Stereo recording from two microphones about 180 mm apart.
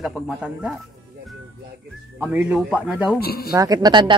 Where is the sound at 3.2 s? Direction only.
60° left (ahead or behind).